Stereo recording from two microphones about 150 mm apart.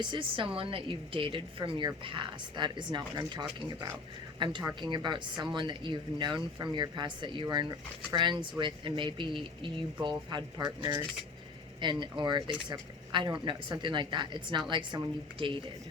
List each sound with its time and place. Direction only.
0.0 s speech: 35° right (ahead or behind)